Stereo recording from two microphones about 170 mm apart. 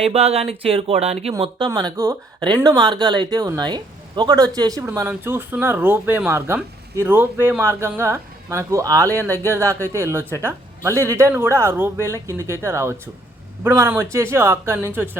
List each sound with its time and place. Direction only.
0.0 s speech: 35° right (ahead or behind)
1.4 s speech: 25° right (ahead or behind)